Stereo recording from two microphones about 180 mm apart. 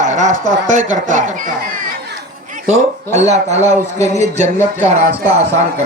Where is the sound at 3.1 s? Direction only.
40° right (ahead or behind).